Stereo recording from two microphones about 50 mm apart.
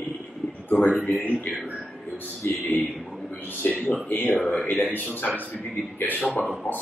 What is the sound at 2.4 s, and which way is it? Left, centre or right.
A man's voice, left.